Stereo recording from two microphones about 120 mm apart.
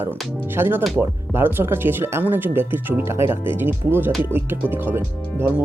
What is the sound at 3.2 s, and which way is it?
Speech, 45° left (ahead or behind).